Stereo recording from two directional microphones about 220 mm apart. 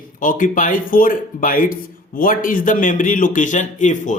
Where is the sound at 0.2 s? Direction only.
35° left (ahead or behind).